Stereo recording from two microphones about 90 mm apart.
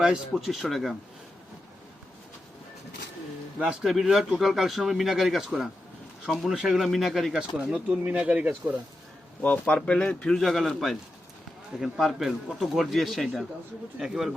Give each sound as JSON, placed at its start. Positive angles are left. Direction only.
{"t": 0.0, "sound": "speech", "side_deg": -5}
{"t": 3.6, "sound": "speech", "side_deg": -10}
{"t": 8.0, "sound": "speech", "side_deg": -15}
{"t": 9.4, "sound": "speech", "side_deg": 15}